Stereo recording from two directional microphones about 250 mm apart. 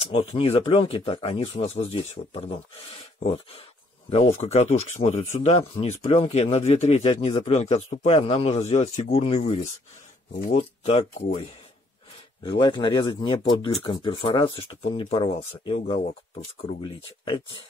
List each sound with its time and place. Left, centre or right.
0.1 s speech: left
12.4 s speech: centre